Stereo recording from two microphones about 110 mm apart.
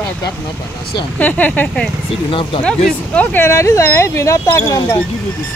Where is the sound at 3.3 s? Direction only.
25° left (ahead or behind).